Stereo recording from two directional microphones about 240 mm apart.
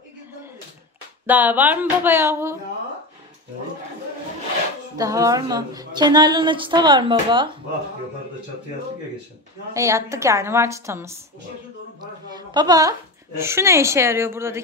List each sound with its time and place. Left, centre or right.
1.2 s a woman's voice: centre
4.9 s a woman's voice: centre
9.8 s a woman's voice: centre